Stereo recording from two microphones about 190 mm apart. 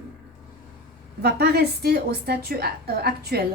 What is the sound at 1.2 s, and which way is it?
A woman's voice, 60° right (ahead or behind).